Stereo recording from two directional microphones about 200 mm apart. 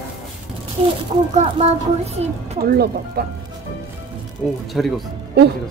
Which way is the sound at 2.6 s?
50° right (ahead or behind).